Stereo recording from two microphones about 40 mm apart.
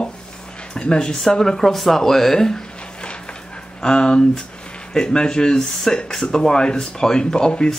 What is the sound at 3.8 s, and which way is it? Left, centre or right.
Speech, left.